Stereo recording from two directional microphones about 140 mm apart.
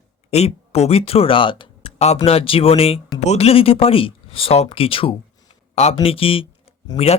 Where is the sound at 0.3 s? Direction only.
50° left (ahead or behind).